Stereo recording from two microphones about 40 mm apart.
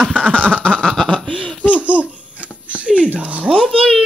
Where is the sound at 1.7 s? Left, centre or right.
Right.